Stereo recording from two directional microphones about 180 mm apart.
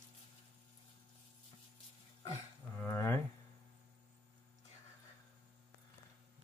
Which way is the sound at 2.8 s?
15° left (ahead or behind).